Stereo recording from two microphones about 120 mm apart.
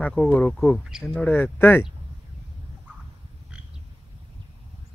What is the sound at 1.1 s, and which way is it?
Speech, 15° left (ahead or behind).